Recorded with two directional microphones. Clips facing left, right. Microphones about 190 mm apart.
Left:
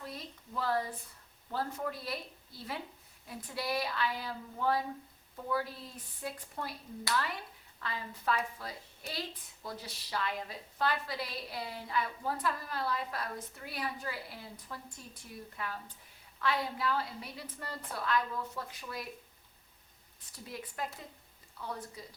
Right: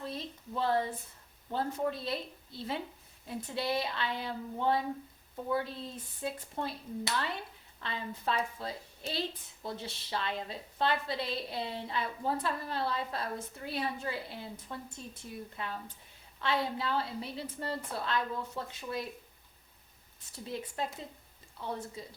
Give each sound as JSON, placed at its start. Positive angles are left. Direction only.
{"t": 0.0, "sound": "a sound", "side_deg": -25}
{"t": 1.5, "sound": "a woman's voice", "side_deg": -25}
{"t": 20.3, "sound": "a woman's voice", "side_deg": -25}